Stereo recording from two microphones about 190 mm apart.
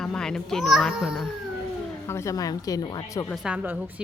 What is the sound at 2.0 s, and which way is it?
Speech, 15° left (ahead or behind).